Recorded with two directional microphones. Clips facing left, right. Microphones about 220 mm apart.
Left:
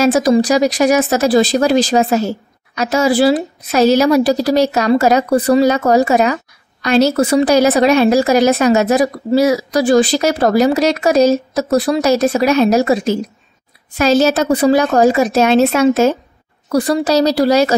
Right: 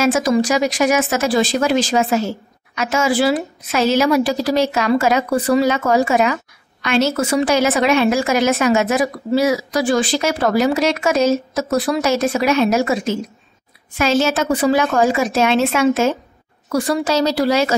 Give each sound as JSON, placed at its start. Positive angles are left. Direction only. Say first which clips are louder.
{"t": 0.0, "sound": "speech", "louder": "left 4 dB", "side_deg": 35}